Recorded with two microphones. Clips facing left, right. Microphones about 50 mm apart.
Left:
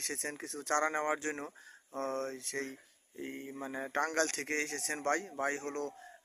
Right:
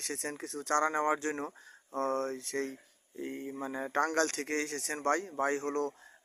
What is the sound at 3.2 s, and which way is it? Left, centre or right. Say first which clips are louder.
Speech: right 4 dB; left.